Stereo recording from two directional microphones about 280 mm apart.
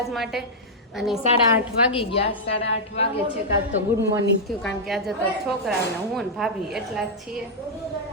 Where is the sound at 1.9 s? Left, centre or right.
Centre.